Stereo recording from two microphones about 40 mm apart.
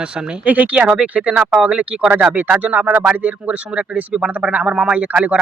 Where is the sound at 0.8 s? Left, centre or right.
Right.